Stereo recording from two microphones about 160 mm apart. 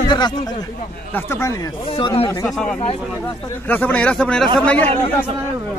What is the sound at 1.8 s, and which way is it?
Speech, 35° left (ahead or behind).